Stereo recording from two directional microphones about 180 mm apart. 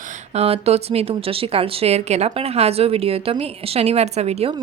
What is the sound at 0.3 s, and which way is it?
Speech, 35° right (ahead or behind).